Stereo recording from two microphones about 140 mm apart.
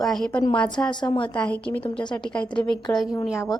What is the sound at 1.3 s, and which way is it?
A woman's voice, 10° left (ahead or behind).